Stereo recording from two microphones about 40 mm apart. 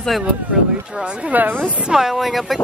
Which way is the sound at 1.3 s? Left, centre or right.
Right.